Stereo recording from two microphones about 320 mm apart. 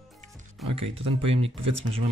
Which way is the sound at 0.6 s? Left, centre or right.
Centre.